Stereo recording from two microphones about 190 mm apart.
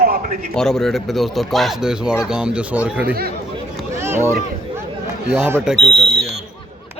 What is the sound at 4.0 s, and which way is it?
Boat, 15° right (ahead or behind).